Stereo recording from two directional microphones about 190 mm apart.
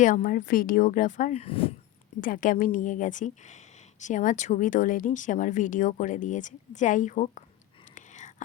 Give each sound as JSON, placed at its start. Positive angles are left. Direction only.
{"t": 0.0, "sound": "a woman's voice", "side_deg": 45}
{"t": 2.2, "sound": "a woman's voice", "side_deg": 45}
{"t": 7.9, "sound": "whispering", "side_deg": 40}